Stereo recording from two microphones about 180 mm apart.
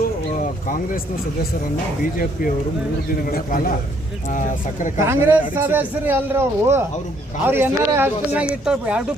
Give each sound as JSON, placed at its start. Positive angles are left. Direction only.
{"t": 3.2, "sound": "speech", "side_deg": 50}
{"t": 4.9, "sound": "a man's voice", "side_deg": -15}